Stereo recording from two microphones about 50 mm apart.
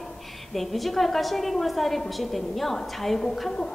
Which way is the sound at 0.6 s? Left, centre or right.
Centre.